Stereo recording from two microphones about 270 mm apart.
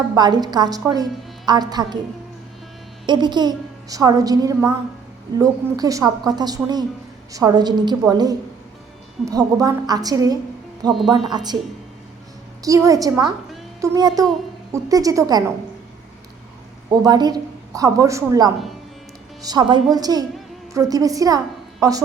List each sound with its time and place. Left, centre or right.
0.1 s a woman's voice: centre
3.1 s a woman's voice: centre
12.6 s a woman's voice: centre
16.9 s a woman's voice: centre